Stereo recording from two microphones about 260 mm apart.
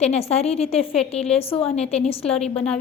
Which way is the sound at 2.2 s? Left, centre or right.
Centre.